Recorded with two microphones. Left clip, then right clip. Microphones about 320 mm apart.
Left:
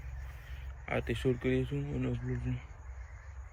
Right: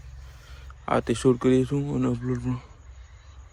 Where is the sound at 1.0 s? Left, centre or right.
Centre.